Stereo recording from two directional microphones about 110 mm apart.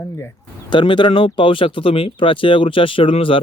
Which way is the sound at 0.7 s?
45° left (ahead or behind).